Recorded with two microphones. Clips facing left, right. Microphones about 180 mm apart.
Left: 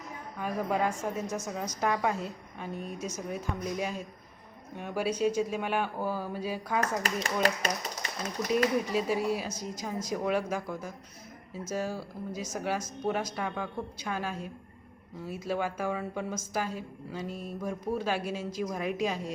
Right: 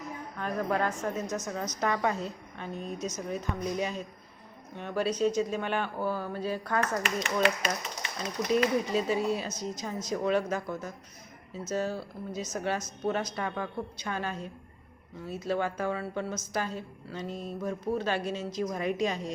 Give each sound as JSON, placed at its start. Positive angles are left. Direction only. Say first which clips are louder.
{"t": 0.3, "sound": "a woman's voice", "louder": "even", "side_deg": 10}
{"t": 7.0, "sound": "speech", "louder": "right 1 dB", "side_deg": 35}
{"t": 8.9, "sound": "a woman's voice", "louder": "right 1 dB", "side_deg": 10}